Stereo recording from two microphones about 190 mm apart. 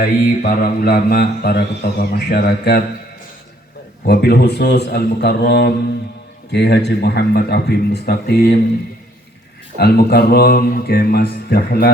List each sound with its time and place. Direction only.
0.0 s a man's voice: 50° left (ahead or behind)
4.0 s speech: 55° left (ahead or behind)
9.7 s speech: 55° left (ahead or behind)